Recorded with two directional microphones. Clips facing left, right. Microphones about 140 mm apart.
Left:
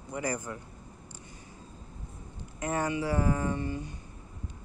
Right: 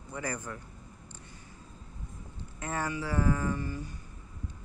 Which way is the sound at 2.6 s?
20° left (ahead or behind).